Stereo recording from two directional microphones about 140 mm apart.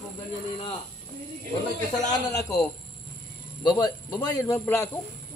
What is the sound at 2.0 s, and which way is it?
Speech, 25° left (ahead or behind).